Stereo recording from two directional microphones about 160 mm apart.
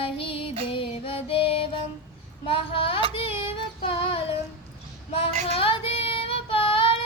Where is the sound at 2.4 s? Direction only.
35° left (ahead or behind).